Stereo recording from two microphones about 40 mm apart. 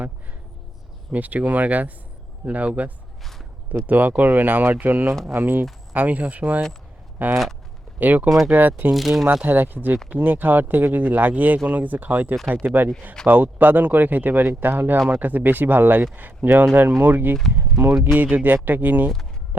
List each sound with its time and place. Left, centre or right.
1.1 s speech: right
5.9 s speech: right
7.9 s speech: right
8.9 s speech: centre
9.2 s speech: right
17.7 s speech: centre
18.1 s speech: right